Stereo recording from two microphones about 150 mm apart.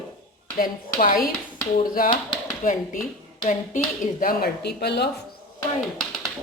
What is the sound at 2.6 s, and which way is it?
Speech, 60° left (ahead or behind).